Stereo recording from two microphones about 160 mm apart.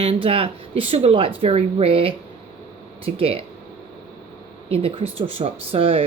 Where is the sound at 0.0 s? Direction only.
35° right (ahead or behind).